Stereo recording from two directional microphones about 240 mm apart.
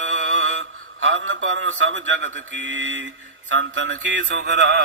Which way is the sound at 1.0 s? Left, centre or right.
Right.